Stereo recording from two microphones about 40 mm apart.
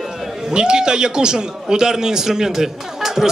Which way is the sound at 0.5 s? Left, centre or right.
Right.